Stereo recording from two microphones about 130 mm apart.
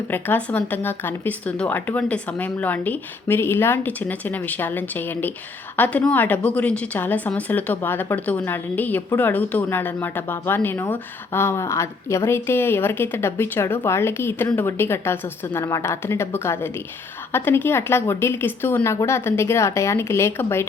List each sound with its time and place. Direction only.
0.1 s a woman's voice: 15° left (ahead or behind)